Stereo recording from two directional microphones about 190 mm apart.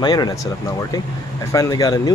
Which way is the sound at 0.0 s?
20° left (ahead or behind).